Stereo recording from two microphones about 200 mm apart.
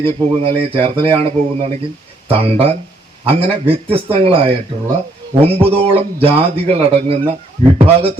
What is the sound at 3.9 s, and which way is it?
A man's voice, 30° right (ahead or behind).